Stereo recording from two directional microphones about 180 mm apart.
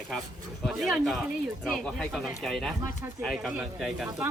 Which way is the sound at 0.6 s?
Centre (ahead or behind).